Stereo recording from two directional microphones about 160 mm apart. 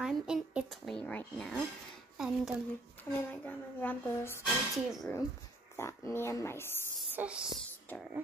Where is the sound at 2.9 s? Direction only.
10° left (ahead or behind).